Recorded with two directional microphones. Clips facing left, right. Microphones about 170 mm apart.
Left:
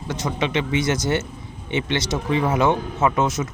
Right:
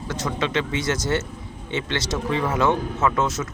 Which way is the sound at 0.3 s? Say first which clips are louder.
Left 1 dB; 20° left (ahead or behind).